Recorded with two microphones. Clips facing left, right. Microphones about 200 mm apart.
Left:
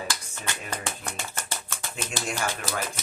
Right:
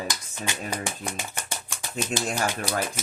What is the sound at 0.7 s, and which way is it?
Speech, 10° right (ahead or behind).